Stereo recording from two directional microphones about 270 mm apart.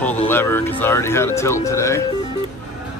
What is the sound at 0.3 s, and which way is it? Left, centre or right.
Speech, centre.